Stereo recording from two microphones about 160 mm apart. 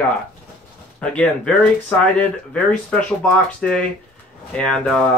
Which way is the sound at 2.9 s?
5° left (ahead or behind).